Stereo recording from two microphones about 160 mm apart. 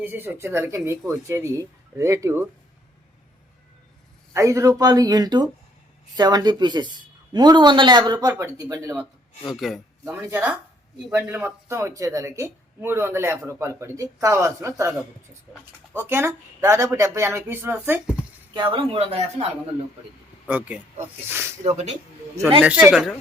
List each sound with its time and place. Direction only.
0.0 s speech: 15° right (ahead or behind)
4.4 s speech: 20° right (ahead or behind)
9.5 s speech: centre (ahead or behind)
10.1 s speech: 10° right (ahead or behind)
18.5 s speech: 30° right (ahead or behind)
20.5 s speech: 10° right (ahead or behind)
21.6 s speech: 45° right (ahead or behind)
22.6 s speech: 10° right (ahead or behind)